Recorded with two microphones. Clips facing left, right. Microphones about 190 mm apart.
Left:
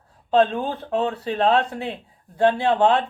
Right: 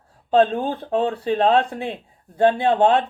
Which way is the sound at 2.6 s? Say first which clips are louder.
Right 2 dB; 50° right (ahead or behind).